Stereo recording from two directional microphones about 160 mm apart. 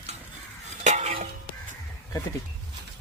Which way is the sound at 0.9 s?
45° right (ahead or behind).